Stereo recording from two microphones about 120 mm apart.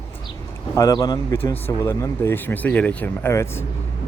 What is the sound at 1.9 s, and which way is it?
Speech, 20° left (ahead or behind).